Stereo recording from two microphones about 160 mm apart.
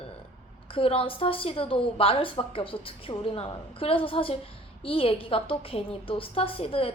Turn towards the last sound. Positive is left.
turn(degrees=35)  # may be behind; listen again after turning